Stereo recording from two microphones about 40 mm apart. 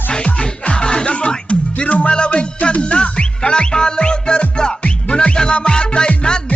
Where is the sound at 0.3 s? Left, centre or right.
Left.